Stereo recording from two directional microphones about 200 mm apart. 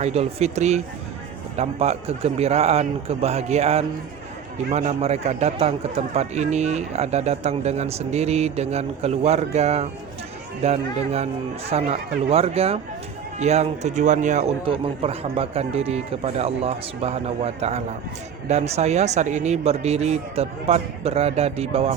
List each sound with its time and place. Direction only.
0.0 s speech: 30° right (ahead or behind)